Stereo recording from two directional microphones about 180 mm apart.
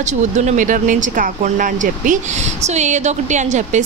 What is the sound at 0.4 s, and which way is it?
A woman's voice, 45° right (ahead or behind).